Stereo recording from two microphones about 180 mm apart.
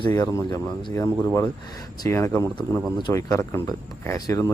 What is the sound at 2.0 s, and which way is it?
A man's voice, 15° left (ahead or behind).